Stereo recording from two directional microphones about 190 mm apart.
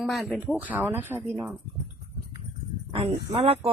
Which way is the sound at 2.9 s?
30° right (ahead or behind).